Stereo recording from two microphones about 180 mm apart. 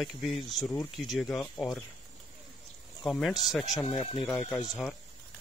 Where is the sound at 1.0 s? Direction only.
Centre (ahead or behind).